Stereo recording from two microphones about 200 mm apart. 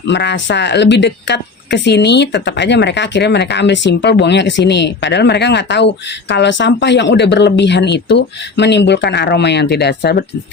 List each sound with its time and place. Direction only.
0.1 s speech: 60° left (ahead or behind)